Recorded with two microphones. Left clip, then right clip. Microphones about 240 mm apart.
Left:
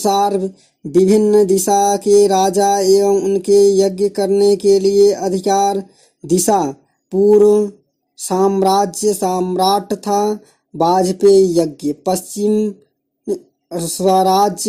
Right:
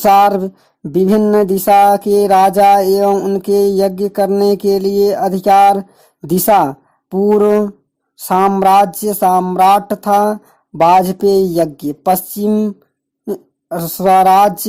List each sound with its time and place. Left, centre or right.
0.0 s music: right
6.2 s speech: right
7.4 s music: right
13.2 s speech: right